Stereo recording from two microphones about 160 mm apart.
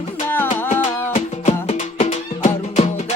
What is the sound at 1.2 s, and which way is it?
Music, 45° left (ahead or behind).